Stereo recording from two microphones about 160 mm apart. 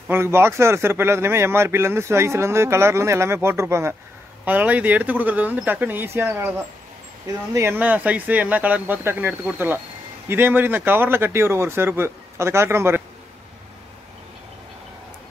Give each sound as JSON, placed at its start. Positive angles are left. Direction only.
{"t": 0.1, "sound": "speech", "side_deg": -15}
{"t": 7.5, "sound": "speech", "side_deg": -15}